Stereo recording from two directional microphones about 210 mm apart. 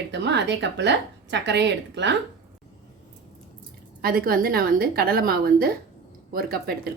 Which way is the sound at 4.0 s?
45° right (ahead or behind).